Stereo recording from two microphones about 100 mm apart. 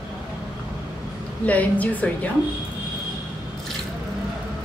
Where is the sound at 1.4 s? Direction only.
15° left (ahead or behind).